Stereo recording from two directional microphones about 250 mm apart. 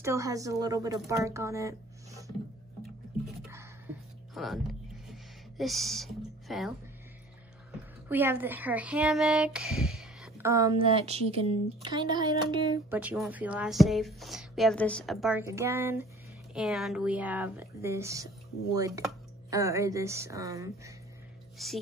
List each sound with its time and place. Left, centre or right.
0.0 s speech: centre
3.4 s a sound: centre
4.3 s speech: centre
8.1 s speech: centre
10.9 s speech: right
13.0 s speech: centre
21.6 s speech: centre